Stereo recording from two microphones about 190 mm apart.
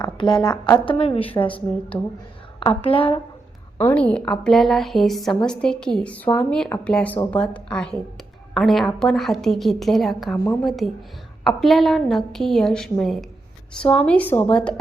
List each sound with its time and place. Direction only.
0.0 s a woman's voice: 25° left (ahead or behind)
3.8 s a woman's voice: 10° left (ahead or behind)
10.3 s a woman's voice: 10° left (ahead or behind)
10.6 s a woman's voice: centre (ahead or behind)